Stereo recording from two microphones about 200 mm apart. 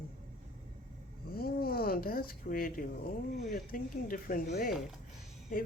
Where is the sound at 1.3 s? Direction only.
50° left (ahead or behind).